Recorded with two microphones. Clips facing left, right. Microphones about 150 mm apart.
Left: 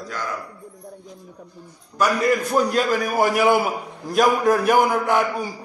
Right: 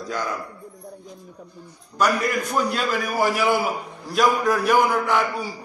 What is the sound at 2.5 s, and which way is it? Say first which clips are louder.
Speech: left 4 dB; 45° left (ahead or behind).